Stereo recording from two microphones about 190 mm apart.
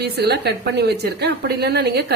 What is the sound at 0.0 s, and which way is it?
A woman's voice, 60° right (ahead or behind).